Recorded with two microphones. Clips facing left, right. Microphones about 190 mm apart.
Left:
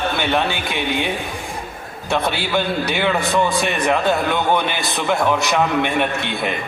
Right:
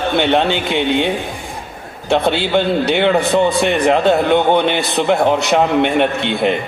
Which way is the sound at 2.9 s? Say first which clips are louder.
Right 6 dB; 25° right (ahead or behind).